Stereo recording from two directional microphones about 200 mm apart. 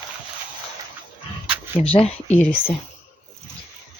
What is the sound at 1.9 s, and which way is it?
Speech, 30° left (ahead or behind).